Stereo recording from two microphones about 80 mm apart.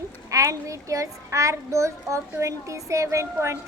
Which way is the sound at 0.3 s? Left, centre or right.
Right.